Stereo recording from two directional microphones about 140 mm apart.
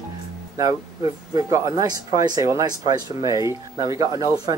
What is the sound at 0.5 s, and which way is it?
Speech, 25° right (ahead or behind).